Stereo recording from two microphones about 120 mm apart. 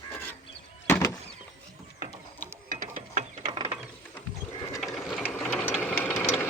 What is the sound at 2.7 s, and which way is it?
Ratchet, 90° right.